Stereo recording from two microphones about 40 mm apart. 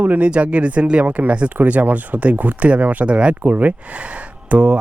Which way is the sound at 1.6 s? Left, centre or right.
Right.